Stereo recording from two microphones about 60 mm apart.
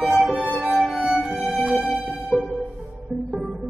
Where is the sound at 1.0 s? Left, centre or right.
Centre.